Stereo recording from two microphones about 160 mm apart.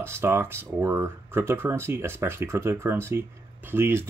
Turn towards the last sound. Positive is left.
turn(degrees=-15)  # may be behind; listen again after turning